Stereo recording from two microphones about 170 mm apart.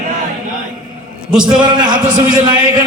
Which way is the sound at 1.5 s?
25° right (ahead or behind).